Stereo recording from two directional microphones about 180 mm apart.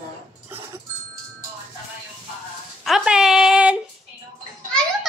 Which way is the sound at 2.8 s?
5° right (ahead or behind).